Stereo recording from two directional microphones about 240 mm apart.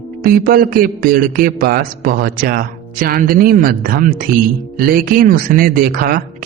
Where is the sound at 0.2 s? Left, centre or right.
Right.